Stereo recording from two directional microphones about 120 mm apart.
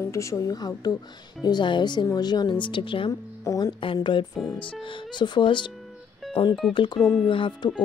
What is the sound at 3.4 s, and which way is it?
Speech, 30° left (ahead or behind).